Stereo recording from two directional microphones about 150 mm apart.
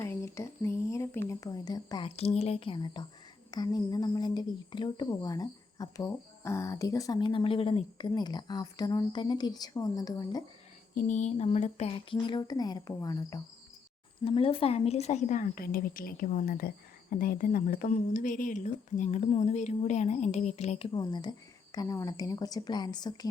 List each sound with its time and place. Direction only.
0.0 s speech: 20° left (ahead or behind)
10.9 s a sound: 60° left (ahead or behind)
12.1 s speech: 25° left (ahead or behind)
14.2 s a woman's voice: 40° left (ahead or behind)